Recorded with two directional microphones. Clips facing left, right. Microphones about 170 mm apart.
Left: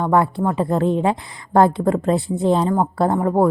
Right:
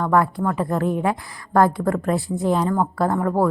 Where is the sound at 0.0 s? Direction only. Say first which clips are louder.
Left 2 dB; 25° left (ahead or behind).